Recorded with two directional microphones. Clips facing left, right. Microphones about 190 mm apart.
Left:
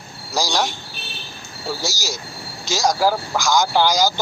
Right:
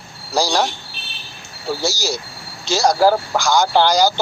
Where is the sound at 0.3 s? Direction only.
15° right (ahead or behind).